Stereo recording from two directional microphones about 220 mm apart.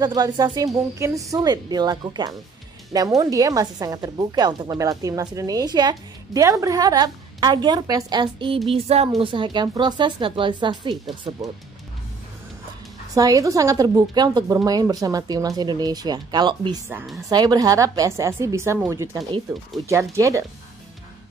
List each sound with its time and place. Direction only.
0.0 s a woman's voice: 15° right (ahead or behind)
13.1 s a woman's voice: 15° right (ahead or behind)
16.9 s a woman's voice: centre (ahead or behind)
17.3 s a woman's voice: 20° right (ahead or behind)